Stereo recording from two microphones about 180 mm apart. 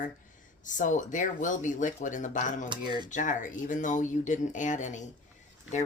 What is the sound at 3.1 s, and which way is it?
Speech, 45° left (ahead or behind).